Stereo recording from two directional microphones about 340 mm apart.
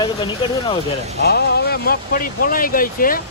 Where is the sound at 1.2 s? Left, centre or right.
Left.